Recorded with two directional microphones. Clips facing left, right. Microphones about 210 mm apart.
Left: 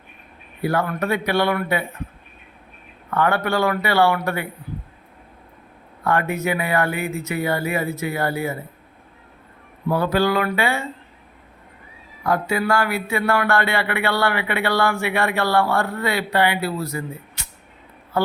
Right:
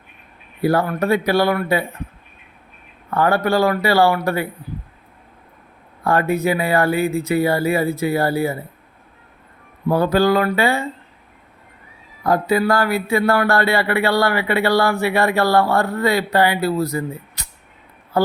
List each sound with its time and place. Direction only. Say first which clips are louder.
0.6 s speech: right 4 dB; 35° right (ahead or behind)
3.2 s speech: right 3 dB; 35° right (ahead or behind)
6.1 s speech: right 4 dB; 35° right (ahead or behind)
9.9 s speech: right 4 dB; 40° right (ahead or behind)
12.2 s speech: right 4 dB; 35° right (ahead or behind)